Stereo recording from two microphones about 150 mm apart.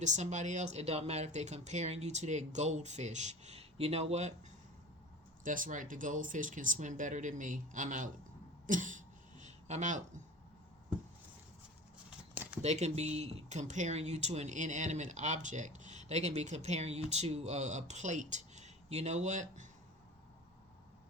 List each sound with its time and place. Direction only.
0.0 s speech: 50° right (ahead or behind)
5.4 s speech: 65° right (ahead or behind)
8.6 s throat clearing: 60° right (ahead or behind)
12.6 s speech: 45° right (ahead or behind)